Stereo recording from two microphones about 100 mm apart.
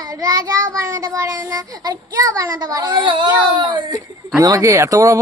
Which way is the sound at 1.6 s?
40° right (ahead or behind).